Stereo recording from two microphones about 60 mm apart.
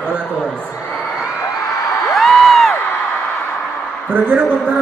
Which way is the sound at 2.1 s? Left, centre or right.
Centre.